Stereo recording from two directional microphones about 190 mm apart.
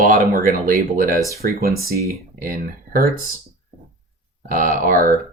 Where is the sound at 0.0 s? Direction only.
45° right (ahead or behind).